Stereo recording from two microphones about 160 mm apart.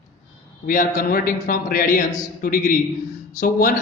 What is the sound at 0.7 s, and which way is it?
A man's voice, 60° left (ahead or behind).